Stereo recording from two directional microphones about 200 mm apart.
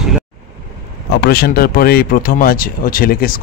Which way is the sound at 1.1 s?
50° left (ahead or behind).